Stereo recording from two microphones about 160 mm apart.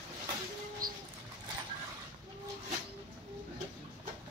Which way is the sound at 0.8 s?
65° right (ahead or behind).